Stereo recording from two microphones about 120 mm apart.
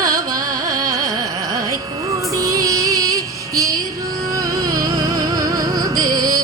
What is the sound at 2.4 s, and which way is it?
Music, 30° right (ahead or behind).